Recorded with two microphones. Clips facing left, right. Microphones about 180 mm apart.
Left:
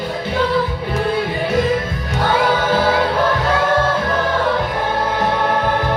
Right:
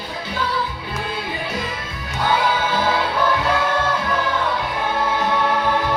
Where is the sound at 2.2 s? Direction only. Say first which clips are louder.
Left 3 dB; 50° left (ahead or behind).